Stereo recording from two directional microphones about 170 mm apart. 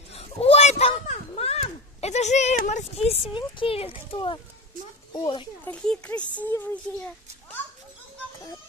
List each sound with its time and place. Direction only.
0.1 s a sound: 35° left (ahead or behind)
5.1 s speech: 30° left (ahead or behind)
5.7 s speech: 5° left (ahead or behind)